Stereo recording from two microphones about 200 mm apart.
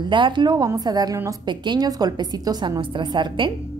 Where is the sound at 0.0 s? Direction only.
25° right (ahead or behind).